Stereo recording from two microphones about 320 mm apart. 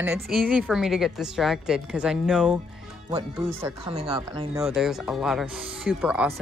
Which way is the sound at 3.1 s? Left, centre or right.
Centre.